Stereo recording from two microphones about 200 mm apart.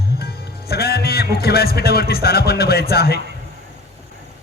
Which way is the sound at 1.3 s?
50° left (ahead or behind).